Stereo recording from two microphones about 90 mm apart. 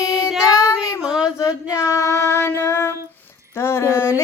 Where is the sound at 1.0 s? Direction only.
5° right (ahead or behind).